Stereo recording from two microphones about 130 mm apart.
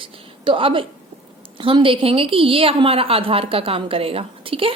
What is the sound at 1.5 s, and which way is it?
A woman's voice, 40° right (ahead or behind).